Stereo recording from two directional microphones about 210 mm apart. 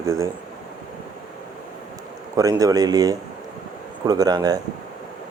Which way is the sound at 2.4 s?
15° right (ahead or behind).